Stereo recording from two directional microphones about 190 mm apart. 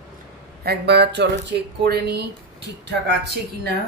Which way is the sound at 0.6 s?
60° right (ahead or behind).